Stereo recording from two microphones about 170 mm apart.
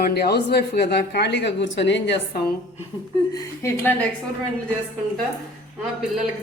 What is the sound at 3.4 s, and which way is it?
Speech, 15° left (ahead or behind).